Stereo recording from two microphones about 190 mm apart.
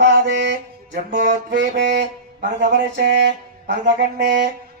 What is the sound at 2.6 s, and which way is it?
Speech, 65° right (ahead or behind).